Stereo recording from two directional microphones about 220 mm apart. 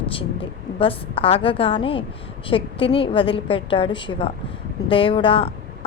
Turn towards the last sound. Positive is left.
turn(degrees=25)  # may be behind; listen again after turning